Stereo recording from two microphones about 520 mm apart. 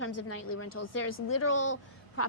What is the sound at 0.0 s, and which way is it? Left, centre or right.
A woman's voice, left.